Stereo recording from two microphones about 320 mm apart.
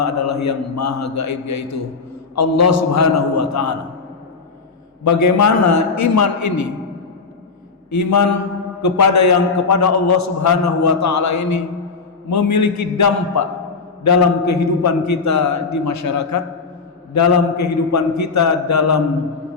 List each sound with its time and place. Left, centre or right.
0.0 s a man's voice: left
5.0 s a man's voice: left
7.9 s a man's voice: left